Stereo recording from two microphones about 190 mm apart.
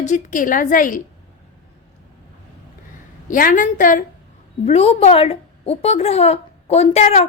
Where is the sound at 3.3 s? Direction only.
45° left (ahead or behind).